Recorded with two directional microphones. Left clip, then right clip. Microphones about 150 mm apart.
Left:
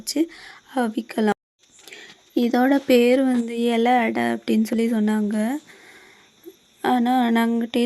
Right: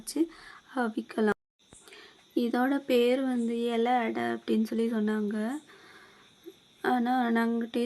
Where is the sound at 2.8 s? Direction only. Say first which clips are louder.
Left 7 dB; 50° left (ahead or behind); by 7.8 s 30° left (ahead or behind).